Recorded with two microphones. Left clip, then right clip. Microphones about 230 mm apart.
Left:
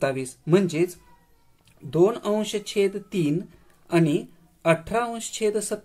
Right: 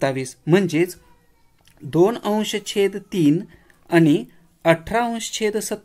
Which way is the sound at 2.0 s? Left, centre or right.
Right.